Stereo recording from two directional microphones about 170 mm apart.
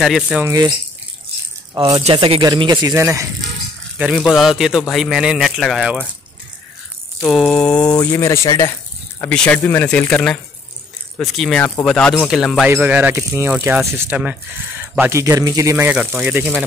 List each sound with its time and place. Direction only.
0.0 s a man's voice: centre (ahead or behind)
0.4 s speech: 20° right (ahead or behind)
1.8 s speech: 30° right (ahead or behind); by 3.3 s 15° right (ahead or behind)
4.0 s a man's voice: centre (ahead or behind)
7.2 s a man's voice: centre (ahead or behind); by 8.7 s 15° left (ahead or behind)
9.2 s a man's voice: 5° left (ahead or behind); by 16.5 s 10° right (ahead or behind)